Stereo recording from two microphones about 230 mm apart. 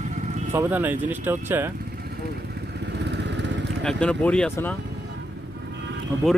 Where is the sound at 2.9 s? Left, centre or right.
Right.